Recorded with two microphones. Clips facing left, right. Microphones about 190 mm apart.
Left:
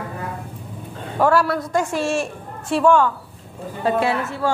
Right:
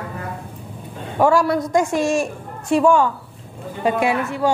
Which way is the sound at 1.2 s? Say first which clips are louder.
Right 2 dB; 15° right (ahead or behind).